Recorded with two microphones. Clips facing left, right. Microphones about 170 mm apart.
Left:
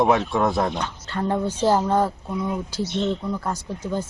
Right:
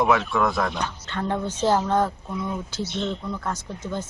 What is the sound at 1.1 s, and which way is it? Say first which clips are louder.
Speech: left 4 dB; 10° left (ahead or behind).